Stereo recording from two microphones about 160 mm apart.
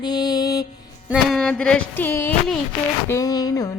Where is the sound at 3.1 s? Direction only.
20° left (ahead or behind).